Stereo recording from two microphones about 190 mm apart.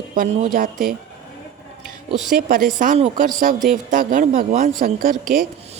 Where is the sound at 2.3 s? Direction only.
45° right (ahead or behind).